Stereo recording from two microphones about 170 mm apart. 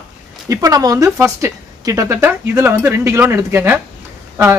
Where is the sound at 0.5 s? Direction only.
20° right (ahead or behind).